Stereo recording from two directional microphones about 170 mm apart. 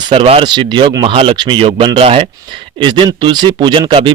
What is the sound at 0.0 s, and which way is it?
A man's voice, 35° right (ahead or behind).